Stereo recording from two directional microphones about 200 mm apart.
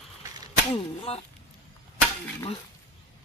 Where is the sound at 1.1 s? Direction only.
30° left (ahead or behind).